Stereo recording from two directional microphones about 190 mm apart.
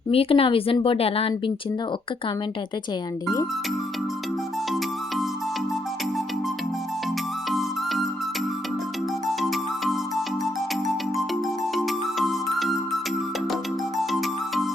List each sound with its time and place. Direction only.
0.1 s a woman's voice: 30° left (ahead or behind)
7.5 s music: centre (ahead or behind)
9.2 s music: centre (ahead or behind)
14.0 s music: centre (ahead or behind)